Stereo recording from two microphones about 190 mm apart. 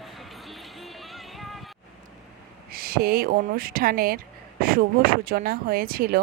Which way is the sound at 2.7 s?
55° right (ahead or behind).